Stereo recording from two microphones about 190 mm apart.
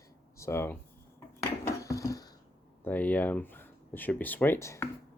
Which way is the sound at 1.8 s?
15° left (ahead or behind).